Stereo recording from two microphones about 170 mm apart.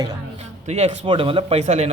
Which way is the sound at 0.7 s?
35° right (ahead or behind).